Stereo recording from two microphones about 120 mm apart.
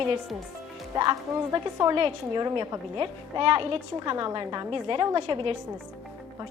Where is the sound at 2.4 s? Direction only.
40° right (ahead or behind).